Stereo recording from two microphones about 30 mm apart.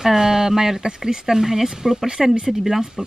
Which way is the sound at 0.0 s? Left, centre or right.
Centre.